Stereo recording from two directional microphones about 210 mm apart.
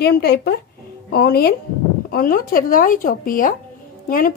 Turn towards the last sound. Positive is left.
turn(degrees=40)  # may be behind; listen again after turning